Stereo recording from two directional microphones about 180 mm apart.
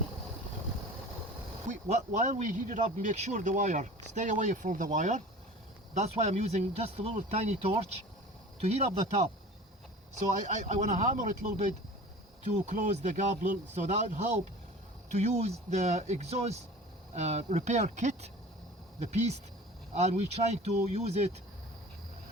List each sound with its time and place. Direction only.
1.6 s speech: 45° right (ahead or behind)